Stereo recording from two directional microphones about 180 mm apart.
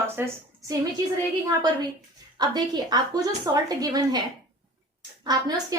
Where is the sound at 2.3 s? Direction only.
20° right (ahead or behind).